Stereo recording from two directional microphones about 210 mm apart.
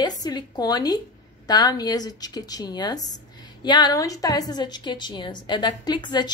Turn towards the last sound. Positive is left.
turn(degrees=20)  # may be behind; listen again after turning